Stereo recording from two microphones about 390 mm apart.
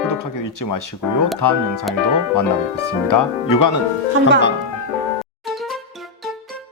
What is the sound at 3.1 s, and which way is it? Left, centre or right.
Speech, left.